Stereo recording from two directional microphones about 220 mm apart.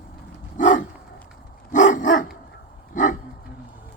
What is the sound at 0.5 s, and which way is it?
Dog, 35° left (ahead or behind).